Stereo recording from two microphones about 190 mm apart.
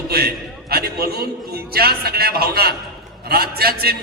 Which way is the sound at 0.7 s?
55° right (ahead or behind).